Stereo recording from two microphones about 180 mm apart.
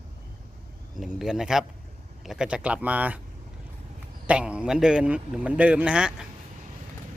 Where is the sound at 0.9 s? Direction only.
5° right (ahead or behind).